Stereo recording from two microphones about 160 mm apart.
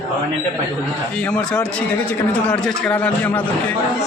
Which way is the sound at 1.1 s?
5° left (ahead or behind).